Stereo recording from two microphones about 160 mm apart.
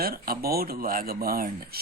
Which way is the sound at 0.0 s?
70° right (ahead or behind).